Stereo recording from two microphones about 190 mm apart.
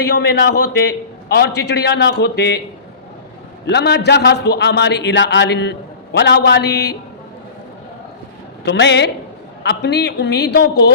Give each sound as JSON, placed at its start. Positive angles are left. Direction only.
{"t": 0.0, "sound": "a man's voice", "side_deg": 65}
{"t": 3.7, "sound": "a man's voice", "side_deg": 65}
{"t": 8.6, "sound": "a man's voice", "side_deg": 65}